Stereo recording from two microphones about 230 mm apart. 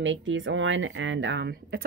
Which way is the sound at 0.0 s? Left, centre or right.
Right.